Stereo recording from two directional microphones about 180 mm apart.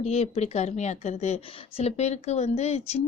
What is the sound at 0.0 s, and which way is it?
A woman's voice, 35° left (ahead or behind).